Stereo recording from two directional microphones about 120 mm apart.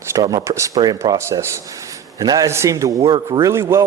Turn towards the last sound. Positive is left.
turn(degrees=-20)  # may be behind; listen again after turning